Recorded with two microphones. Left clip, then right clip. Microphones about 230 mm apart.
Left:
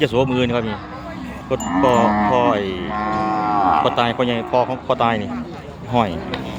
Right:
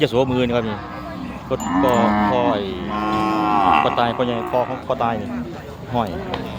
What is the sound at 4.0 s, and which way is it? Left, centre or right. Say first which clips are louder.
Speech: left 1 dB; centre.